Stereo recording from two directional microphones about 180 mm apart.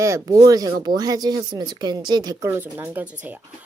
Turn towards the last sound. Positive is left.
turn(degrees=-10)  # may be behind; listen again after turning